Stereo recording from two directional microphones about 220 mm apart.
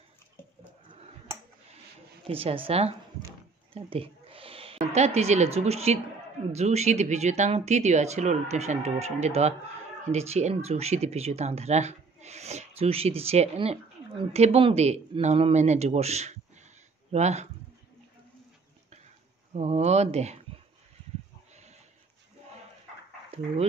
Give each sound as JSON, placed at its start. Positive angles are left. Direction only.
{"t": 2.2, "sound": "a woman's voice", "side_deg": -25}
{"t": 19.5, "sound": "speech", "side_deg": -30}
{"t": 23.3, "sound": "speech", "side_deg": -25}